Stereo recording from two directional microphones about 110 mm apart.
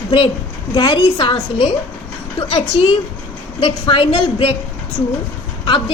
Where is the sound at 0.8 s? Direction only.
45° left (ahead or behind).